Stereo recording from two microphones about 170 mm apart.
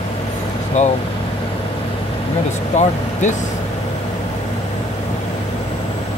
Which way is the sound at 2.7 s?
45° left (ahead or behind).